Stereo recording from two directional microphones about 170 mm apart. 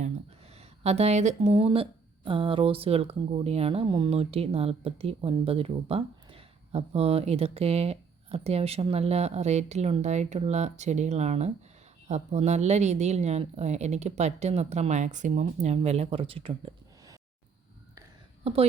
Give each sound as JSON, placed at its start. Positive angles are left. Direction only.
{"t": 0.8, "sound": "a woman's voice", "side_deg": -40}